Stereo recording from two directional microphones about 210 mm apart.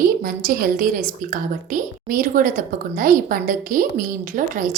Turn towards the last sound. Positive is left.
turn(degrees=-40)  # may be behind; listen again after turning